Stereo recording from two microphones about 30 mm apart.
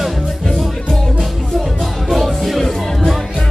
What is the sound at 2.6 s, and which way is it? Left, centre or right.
Music, centre.